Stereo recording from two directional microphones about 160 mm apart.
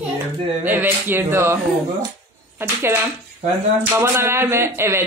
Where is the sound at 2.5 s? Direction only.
15° right (ahead or behind).